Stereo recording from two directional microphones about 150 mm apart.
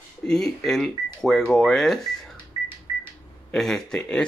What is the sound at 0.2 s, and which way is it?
Speech, 5° left (ahead or behind).